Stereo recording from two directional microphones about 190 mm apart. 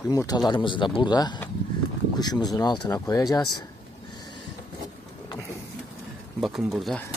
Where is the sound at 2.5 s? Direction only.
20° left (ahead or behind).